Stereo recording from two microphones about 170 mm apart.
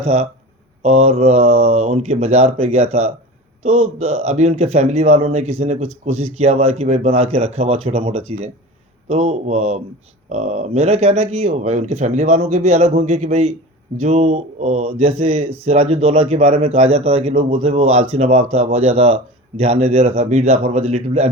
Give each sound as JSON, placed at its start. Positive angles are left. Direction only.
{"t": 0.0, "sound": "speech", "side_deg": -40}